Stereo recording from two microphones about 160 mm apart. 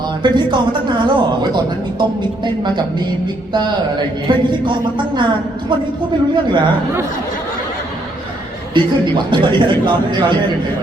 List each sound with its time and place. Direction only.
0.2 s a man's voice: 30° right (ahead or behind)
8.7 s a man's voice: 30° right (ahead or behind)